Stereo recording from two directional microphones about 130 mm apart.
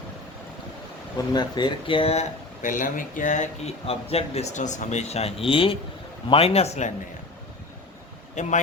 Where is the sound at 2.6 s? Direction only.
90° left; by 3.7 s 70° left (ahead or behind).